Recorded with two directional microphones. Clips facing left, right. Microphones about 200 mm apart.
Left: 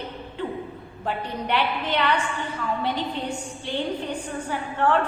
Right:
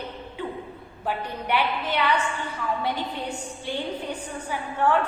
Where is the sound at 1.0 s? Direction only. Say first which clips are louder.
Left 1 dB; 10° right (ahead or behind).